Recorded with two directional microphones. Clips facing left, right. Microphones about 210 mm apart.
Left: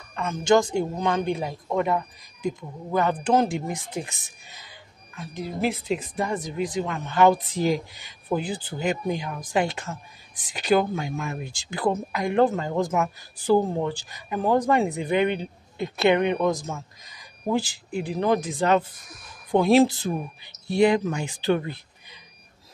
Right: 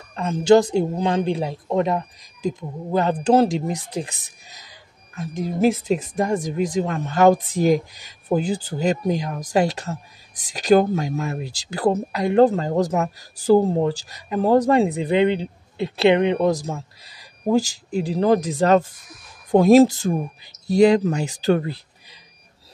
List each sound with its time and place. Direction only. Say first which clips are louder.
0.1 s speech: right 5 dB; 35° right (ahead or behind)